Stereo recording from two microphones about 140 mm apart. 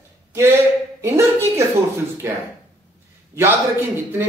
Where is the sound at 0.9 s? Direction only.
20° right (ahead or behind).